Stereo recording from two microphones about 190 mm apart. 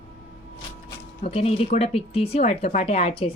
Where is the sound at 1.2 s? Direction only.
30° left (ahead or behind).